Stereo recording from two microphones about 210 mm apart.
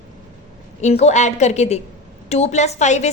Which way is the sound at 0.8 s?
30° left (ahead or behind).